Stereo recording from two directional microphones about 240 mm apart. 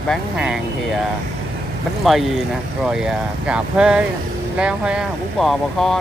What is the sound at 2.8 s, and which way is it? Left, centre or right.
Speech, centre.